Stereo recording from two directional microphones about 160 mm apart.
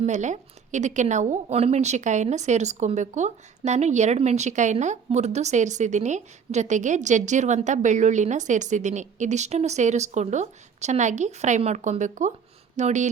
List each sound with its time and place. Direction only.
0.0 s a woman's voice: 50° right (ahead or behind)